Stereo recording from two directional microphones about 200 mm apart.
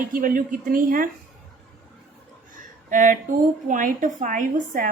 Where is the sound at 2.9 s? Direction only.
40° right (ahead or behind).